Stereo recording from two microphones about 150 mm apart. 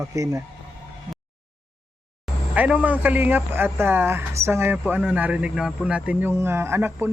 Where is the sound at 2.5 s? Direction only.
10° right (ahead or behind).